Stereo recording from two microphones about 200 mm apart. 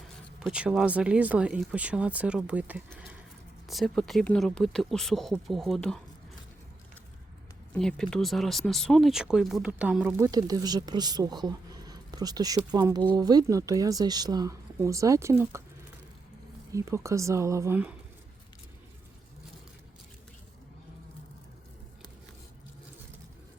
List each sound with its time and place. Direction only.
0.3 s speech: 5° right (ahead or behind)
7.7 s speech: 5° left (ahead or behind); by 15.6 s 15° right (ahead or behind)
16.7 s speech: 15° right (ahead or behind)